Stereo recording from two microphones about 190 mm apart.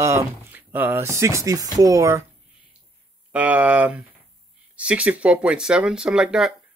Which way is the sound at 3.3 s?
10° right (ahead or behind).